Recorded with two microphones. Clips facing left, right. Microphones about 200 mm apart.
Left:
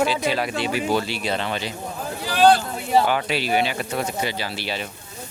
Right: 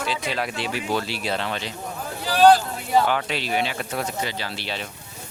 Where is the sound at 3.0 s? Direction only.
5° left (ahead or behind).